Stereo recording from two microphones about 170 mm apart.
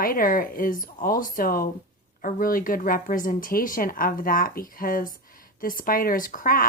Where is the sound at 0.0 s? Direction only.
55° left (ahead or behind).